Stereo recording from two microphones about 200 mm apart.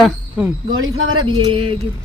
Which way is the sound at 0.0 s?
5° right (ahead or behind).